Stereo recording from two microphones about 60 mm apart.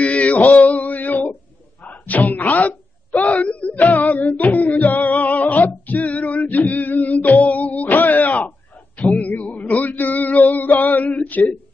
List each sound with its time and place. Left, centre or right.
0.0 s male singing: left
1.9 s music: left
9.3 s male singing: left